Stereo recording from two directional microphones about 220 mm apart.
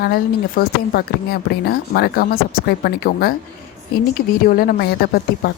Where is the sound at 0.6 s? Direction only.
45° left (ahead or behind).